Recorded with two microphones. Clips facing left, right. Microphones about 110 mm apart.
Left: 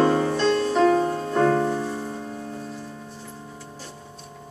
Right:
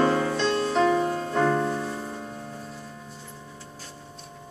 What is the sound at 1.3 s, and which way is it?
Music, centre (ahead or behind).